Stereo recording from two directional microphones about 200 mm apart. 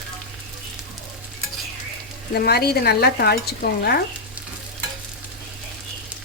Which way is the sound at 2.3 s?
50° left (ahead or behind).